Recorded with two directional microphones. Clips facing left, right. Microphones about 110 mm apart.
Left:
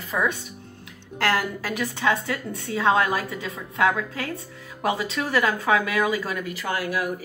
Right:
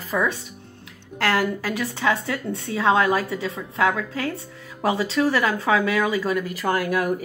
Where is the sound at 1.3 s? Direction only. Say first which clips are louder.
Right 6 dB; 30° right (ahead or behind).